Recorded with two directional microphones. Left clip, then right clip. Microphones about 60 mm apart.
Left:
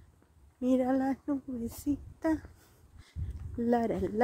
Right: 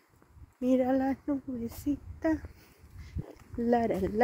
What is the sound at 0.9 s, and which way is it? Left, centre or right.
Speech, right.